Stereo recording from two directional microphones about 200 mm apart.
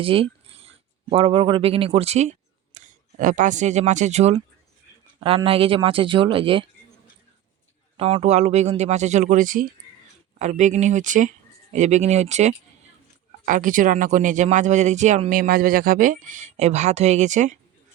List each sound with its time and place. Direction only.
0.0 s a sound: 25° right (ahead or behind)
1.1 s speech: 25° right (ahead or behind)
7.9 s speech: 30° right (ahead or behind)